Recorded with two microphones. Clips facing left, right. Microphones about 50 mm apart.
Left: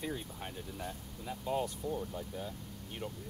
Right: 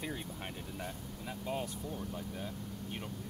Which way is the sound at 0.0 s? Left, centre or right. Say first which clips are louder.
Left 1 dB; centre.